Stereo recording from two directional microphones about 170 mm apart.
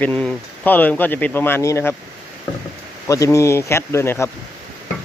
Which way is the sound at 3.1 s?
20° left (ahead or behind).